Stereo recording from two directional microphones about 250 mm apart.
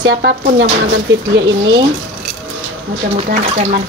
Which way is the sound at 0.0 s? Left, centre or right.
Right.